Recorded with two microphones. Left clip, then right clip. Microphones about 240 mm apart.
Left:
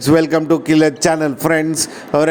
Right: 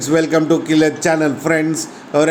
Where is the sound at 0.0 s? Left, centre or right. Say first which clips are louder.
Left 1 dB; left.